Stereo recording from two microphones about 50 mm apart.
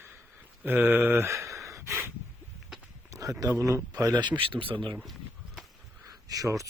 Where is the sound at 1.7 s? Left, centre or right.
Right.